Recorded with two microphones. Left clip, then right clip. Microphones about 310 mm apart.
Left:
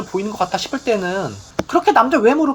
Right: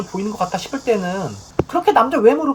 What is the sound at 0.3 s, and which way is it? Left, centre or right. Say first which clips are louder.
Speech: left 1 dB; left.